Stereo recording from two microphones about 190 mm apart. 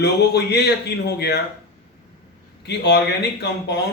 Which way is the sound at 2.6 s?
60° left (ahead or behind).